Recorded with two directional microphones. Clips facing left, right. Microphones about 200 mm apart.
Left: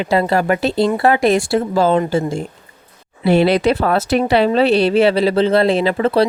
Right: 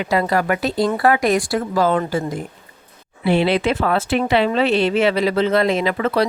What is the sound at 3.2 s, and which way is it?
Speech, 40° left (ahead or behind).